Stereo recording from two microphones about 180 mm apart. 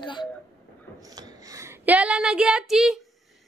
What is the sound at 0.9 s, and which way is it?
Speech, 20° right (ahead or behind).